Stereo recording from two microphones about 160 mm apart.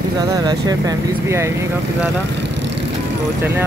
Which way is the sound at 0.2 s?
20° right (ahead or behind).